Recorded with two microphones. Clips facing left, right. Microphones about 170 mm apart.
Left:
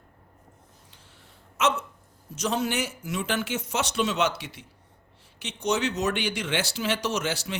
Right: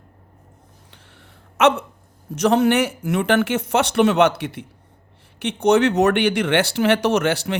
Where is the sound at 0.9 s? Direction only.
65° right (ahead or behind).